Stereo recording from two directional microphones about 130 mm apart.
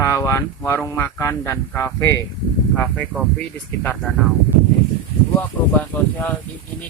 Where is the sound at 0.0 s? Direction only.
25° left (ahead or behind).